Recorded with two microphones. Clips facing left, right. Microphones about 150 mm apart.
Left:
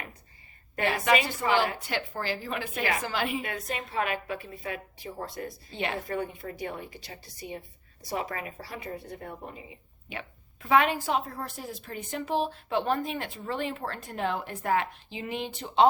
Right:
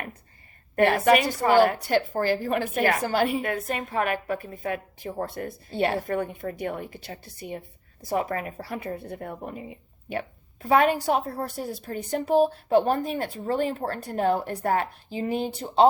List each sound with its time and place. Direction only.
0.8 s a woman's voice: 55° right (ahead or behind); by 15.9 s 35° right (ahead or behind)